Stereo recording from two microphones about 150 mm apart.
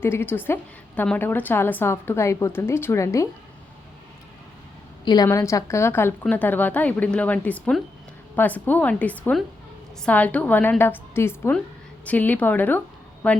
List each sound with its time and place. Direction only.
0.0 s a woman's voice: 15° left (ahead or behind)
5.0 s a woman's voice: 25° left (ahead or behind); by 13.4 s 10° left (ahead or behind)